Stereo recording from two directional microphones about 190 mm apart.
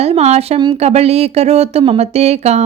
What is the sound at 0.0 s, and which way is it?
Speech, 35° right (ahead or behind).